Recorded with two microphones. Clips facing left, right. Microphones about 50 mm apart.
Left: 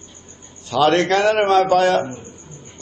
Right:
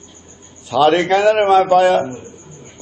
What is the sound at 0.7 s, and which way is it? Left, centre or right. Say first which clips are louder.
A man's voice: right 3 dB; centre.